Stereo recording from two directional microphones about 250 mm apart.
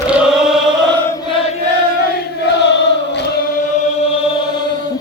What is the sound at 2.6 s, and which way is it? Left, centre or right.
Chant, left.